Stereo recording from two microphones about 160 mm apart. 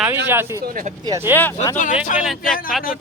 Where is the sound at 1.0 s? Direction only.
20° right (ahead or behind).